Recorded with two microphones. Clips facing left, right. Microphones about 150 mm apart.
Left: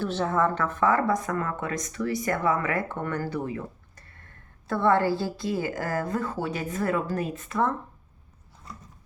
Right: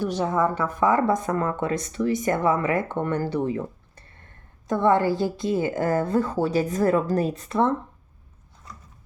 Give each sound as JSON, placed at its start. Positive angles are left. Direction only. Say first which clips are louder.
{"t": 0.0, "sound": "a woman's voice", "louder": "right 2 dB", "side_deg": -15}